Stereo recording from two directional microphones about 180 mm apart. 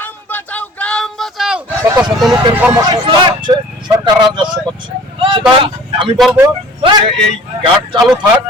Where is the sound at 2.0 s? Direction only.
5° right (ahead or behind).